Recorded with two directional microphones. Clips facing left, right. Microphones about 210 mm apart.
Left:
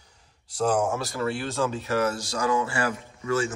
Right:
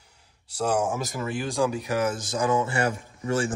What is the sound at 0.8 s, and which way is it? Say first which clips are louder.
Speech: left 2 dB; 15° right (ahead or behind).